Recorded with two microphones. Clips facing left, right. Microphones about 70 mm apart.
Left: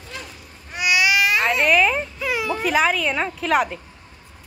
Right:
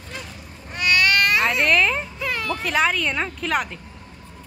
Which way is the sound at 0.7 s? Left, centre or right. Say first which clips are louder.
Even; centre.